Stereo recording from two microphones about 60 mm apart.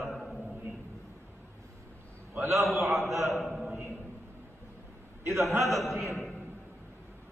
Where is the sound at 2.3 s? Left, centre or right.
Right.